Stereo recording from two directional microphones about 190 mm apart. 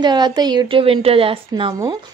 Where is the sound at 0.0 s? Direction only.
20° right (ahead or behind).